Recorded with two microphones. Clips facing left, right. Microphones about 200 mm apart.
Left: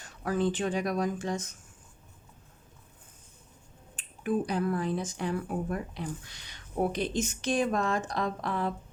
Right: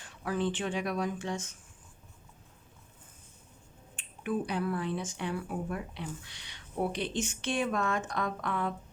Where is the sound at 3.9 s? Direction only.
40° left (ahead or behind).